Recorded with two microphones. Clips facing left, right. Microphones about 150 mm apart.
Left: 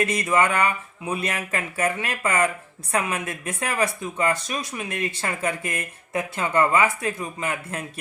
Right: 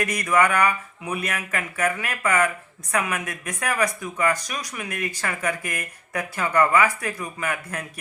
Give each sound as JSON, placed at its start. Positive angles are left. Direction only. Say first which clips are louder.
{"t": 0.0, "sound": "speech", "louder": "even", "side_deg": 25}